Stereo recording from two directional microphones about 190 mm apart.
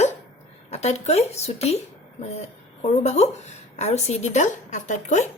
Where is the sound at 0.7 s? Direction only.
35° left (ahead or behind).